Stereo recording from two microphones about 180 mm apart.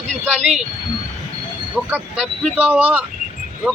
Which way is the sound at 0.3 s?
5° right (ahead or behind).